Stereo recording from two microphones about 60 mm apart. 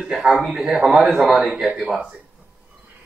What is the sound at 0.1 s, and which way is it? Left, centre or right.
Speech, centre.